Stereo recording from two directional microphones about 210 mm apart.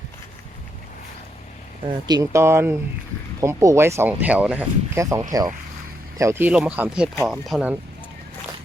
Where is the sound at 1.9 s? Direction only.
20° right (ahead or behind); by 7.7 s 5° right (ahead or behind).